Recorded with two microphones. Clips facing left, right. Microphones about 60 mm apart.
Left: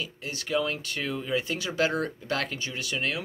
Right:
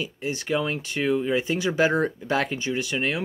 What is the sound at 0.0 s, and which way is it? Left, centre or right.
Speech, right.